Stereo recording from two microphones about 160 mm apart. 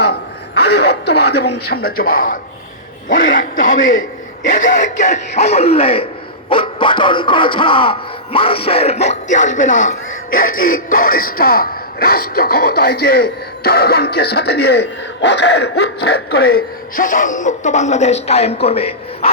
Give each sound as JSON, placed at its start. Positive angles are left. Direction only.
{"t": 0.0, "sound": "radio", "side_deg": 90}
{"t": 3.1, "sound": "a man's voice", "side_deg": 60}